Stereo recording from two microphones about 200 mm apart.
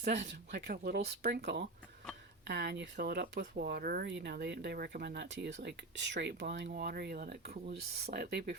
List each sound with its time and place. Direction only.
0.0 s speech: 55° right (ahead or behind)